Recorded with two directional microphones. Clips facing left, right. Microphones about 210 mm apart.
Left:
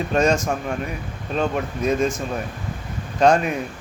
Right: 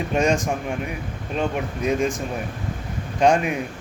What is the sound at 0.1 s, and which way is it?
A man's voice, 15° right (ahead or behind).